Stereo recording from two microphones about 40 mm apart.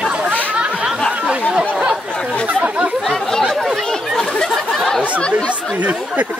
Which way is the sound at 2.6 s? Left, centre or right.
Right.